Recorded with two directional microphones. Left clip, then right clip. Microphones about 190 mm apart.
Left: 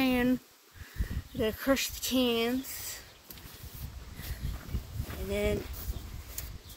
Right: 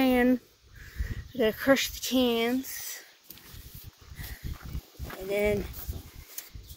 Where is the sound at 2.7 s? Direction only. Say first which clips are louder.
Right 2 dB; 35° right (ahead or behind).